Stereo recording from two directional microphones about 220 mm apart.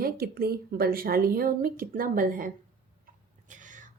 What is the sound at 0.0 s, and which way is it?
Speech, 45° right (ahead or behind).